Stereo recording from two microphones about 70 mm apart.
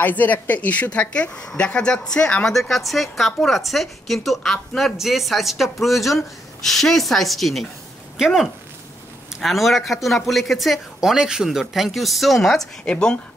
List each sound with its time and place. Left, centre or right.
0.0 s a woman's voice: left; by 7.6 s centre
9.4 s a woman's voice: centre
12.8 s speech: centre